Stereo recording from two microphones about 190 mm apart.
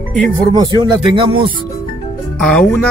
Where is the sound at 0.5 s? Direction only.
25° right (ahead or behind).